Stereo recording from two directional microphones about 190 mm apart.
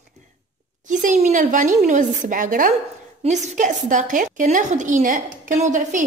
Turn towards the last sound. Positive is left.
turn(degrees=-40)  # may be behind; listen again after turning